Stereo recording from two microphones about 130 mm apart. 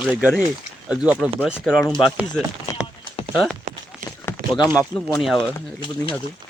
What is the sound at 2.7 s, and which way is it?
Clip-clop, 25° left (ahead or behind).